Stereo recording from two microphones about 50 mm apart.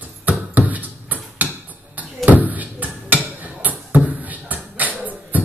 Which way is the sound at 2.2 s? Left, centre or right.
Right.